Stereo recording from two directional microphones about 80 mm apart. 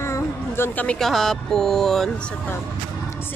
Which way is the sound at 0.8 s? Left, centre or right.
Centre.